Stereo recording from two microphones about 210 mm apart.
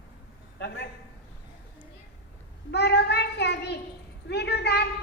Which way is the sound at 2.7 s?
50° left (ahead or behind).